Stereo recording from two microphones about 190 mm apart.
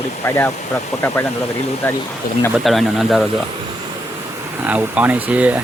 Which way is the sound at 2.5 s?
Centre (ahead or behind).